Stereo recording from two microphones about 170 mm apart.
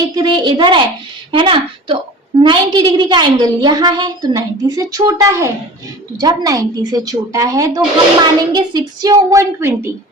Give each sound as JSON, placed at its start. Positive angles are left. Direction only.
{"t": 0.1, "sound": "a woman's voice", "side_deg": -25}